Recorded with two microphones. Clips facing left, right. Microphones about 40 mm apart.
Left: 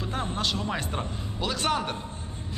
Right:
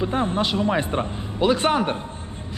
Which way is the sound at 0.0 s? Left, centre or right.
Right.